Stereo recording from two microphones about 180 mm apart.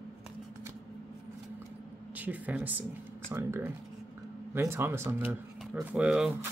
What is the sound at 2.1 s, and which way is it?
Speech, 10° right (ahead or behind).